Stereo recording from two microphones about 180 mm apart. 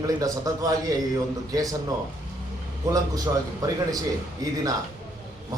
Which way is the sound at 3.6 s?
20° right (ahead or behind).